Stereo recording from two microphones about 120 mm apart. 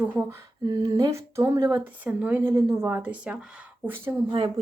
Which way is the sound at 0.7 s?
35° right (ahead or behind).